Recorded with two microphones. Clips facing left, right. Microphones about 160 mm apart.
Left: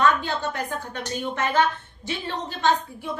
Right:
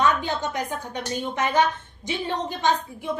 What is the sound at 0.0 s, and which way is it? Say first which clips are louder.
A child's voice: left 1 dB; 15° right (ahead or behind).